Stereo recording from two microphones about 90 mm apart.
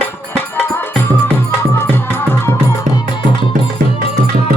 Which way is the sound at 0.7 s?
25° left (ahead or behind).